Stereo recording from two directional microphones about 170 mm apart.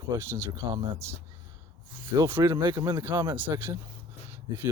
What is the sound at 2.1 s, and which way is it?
Speech, 15° right (ahead or behind).